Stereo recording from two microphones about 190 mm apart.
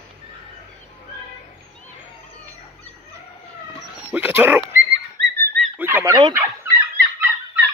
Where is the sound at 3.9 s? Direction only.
10° right (ahead or behind).